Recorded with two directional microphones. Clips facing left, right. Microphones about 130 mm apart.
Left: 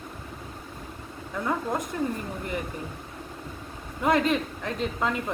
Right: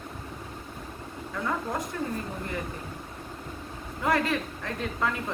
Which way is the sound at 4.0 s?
20° left (ahead or behind).